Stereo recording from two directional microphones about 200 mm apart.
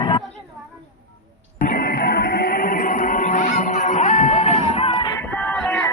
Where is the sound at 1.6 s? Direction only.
45° left (ahead or behind); by 5.1 s 30° left (ahead or behind).